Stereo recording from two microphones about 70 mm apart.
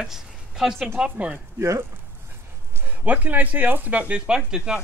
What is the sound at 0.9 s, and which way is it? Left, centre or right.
Speech, centre.